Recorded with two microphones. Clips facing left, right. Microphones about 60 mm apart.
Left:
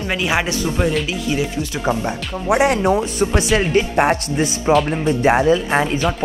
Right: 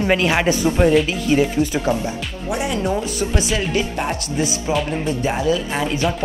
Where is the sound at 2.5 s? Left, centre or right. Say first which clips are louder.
Left 8 dB; left.